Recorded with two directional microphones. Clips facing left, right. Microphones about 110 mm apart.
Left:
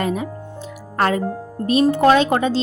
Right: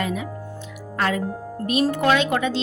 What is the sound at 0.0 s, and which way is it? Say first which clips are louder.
Speech: left 4 dB; 40° left (ahead or behind).